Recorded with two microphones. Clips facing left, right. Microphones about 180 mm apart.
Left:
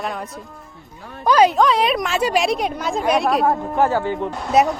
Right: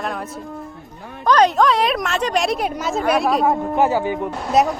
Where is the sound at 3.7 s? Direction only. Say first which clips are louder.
Right 1 dB; 15° right (ahead or behind).